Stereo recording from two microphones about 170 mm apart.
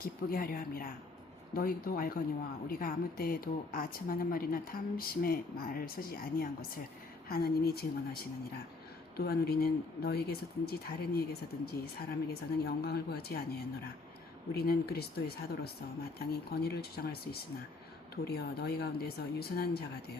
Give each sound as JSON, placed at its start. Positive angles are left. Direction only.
{"t": 0.0, "sound": "speech", "side_deg": 60}